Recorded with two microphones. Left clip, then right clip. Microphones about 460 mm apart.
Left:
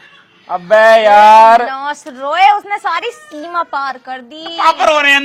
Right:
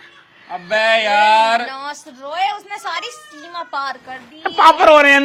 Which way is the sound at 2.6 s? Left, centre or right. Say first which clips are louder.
Left 8 dB; left.